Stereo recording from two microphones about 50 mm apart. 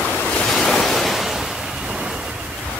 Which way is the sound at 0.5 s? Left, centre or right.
Centre.